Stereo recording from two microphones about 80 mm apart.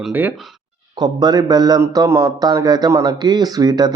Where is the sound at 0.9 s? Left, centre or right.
Right.